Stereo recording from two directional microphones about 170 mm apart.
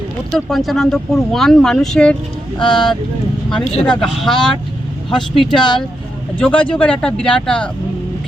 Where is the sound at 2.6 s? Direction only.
30° left (ahead or behind).